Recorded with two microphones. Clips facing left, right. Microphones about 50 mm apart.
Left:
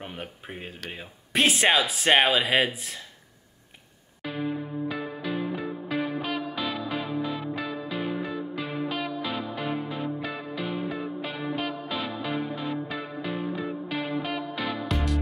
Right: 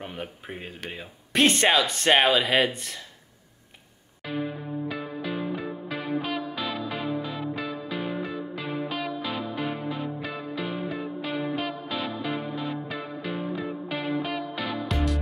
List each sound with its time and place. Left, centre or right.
0.0 s speech: centre
4.8 s music: centre